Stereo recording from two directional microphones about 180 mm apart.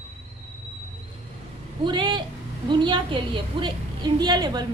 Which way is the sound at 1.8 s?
25° right (ahead or behind).